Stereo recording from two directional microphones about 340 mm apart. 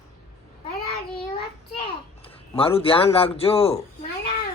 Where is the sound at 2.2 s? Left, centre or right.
Centre.